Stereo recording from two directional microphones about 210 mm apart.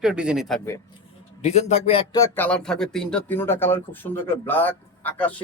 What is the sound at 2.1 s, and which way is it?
Speech, 15° left (ahead or behind).